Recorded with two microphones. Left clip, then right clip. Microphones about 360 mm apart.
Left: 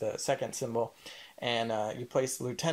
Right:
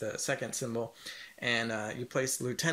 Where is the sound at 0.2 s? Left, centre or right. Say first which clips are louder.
Left 2 dB; left.